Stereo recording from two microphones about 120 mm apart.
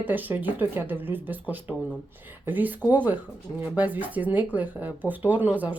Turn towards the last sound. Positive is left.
turn(degrees=-15)  # may be behind; listen again after turning